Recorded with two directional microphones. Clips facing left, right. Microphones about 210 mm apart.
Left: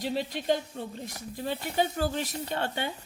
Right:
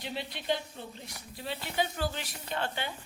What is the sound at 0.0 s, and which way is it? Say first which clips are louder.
A woman's voice: left 7 dB; 45° left (ahead or behind).